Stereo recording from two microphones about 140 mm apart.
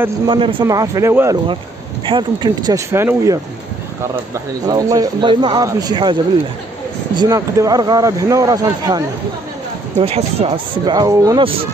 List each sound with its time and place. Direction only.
0.3 s speech: 35° right (ahead or behind)
0.7 s speech: 25° right (ahead or behind)
2.0 s speech: 35° right (ahead or behind)
4.6 s speech: 25° right (ahead or behind)
7.2 s speech: 25° right (ahead or behind)
9.9 s speech: 45° right (ahead or behind)
10.9 s speech: 25° right (ahead or behind)